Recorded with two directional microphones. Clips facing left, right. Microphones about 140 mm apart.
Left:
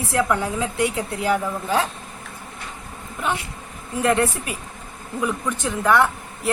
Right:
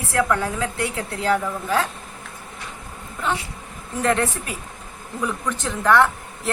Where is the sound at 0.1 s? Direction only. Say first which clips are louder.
Right 1 dB; 15° left (ahead or behind).